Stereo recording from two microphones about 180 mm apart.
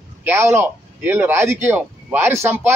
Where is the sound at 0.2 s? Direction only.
15° right (ahead or behind).